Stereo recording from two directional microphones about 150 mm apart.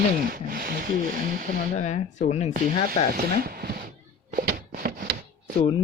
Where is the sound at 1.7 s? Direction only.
50° left (ahead or behind).